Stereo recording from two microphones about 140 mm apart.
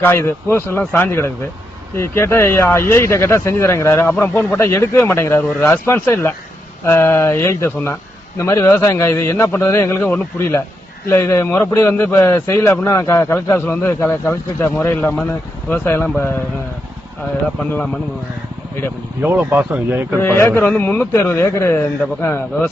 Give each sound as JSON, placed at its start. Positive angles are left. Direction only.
{"t": 0.0, "sound": "a man's voice", "side_deg": 15}
{"t": 17.6, "sound": "a man's voice", "side_deg": 10}
{"t": 19.2, "sound": "speech", "side_deg": -15}
{"t": 20.1, "sound": "a man's voice", "side_deg": 15}